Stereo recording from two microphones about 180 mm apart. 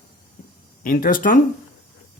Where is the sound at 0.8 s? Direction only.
50° left (ahead or behind).